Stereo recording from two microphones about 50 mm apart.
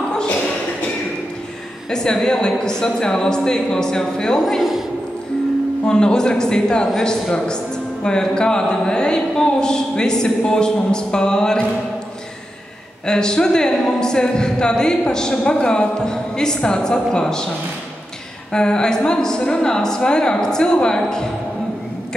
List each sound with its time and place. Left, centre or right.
1.9 s speech: centre
4.5 s a man's voice: centre
5.9 s speech: centre
13.0 s speech: centre
18.5 s speech: centre